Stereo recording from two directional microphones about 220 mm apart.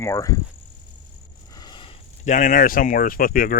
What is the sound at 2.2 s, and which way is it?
Speech, 35° left (ahead or behind).